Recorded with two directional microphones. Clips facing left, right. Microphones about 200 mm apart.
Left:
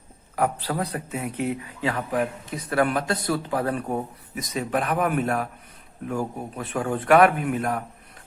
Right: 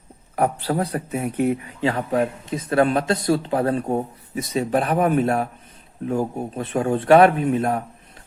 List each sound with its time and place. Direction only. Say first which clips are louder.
0.3 s speech: right 4 dB; 30° right (ahead or behind)